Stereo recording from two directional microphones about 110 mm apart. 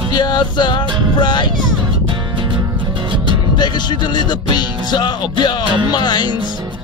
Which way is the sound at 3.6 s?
40° left (ahead or behind).